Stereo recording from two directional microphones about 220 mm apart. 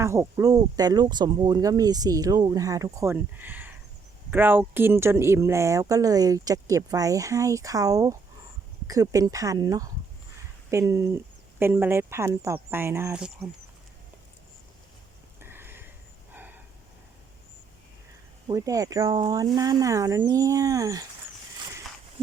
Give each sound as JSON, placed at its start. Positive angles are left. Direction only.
{"t": 0.0, "sound": "speech", "side_deg": -10}
{"t": 15.4, "sound": "a sound", "side_deg": -10}
{"t": 18.4, "sound": "speech", "side_deg": -15}